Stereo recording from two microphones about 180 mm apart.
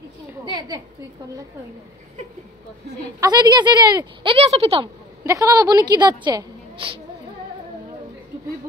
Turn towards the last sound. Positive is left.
turn(degrees=-30)  # may be behind; listen again after turning